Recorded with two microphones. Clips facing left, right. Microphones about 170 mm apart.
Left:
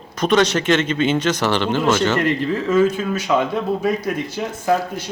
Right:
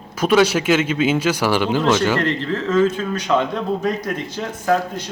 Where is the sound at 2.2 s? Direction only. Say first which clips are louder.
Left 2 dB; 10° left (ahead or behind).